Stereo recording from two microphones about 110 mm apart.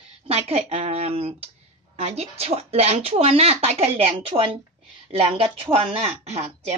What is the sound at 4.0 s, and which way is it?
Speech, 60° right (ahead or behind).